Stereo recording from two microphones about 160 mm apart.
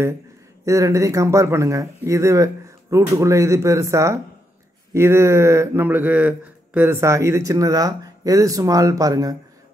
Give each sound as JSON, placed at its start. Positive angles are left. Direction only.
{"t": 0.7, "sound": "speech", "side_deg": -20}